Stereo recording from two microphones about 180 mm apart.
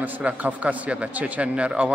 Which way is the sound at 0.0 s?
10° right (ahead or behind).